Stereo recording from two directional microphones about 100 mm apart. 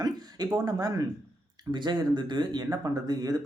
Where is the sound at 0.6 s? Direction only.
40° right (ahead or behind).